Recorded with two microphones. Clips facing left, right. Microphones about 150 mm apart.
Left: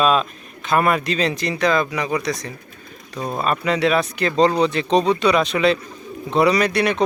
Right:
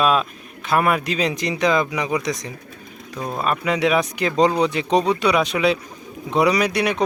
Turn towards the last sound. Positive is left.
turn(degrees=-10)  # may be behind; listen again after turning